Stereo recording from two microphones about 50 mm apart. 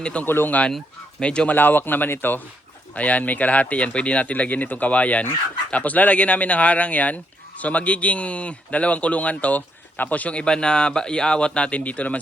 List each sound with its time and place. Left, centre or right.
0.0 s speech: left
0.3 s speech: left
1.2 s speech: left
1.5 s speech: left
2.9 s speech: left
10.4 s speech: centre